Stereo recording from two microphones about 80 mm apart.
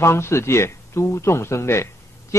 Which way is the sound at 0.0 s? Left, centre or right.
Left.